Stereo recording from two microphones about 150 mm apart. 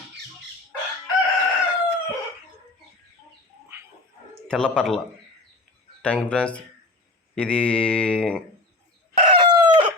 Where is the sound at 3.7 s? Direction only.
15° right (ahead or behind).